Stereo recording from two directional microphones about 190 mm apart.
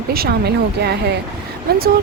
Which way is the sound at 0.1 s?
55° right (ahead or behind).